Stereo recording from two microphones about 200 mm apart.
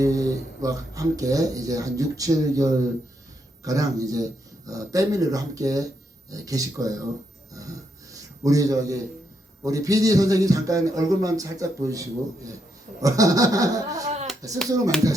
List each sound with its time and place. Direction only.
0.0 s a man's voice: 15° right (ahead or behind)
8.1 s a man's voice: 15° right (ahead or behind)